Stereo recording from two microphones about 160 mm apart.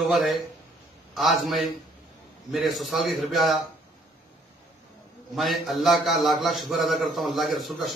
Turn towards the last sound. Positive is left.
turn(degrees=0)  # may be behind; listen again after turning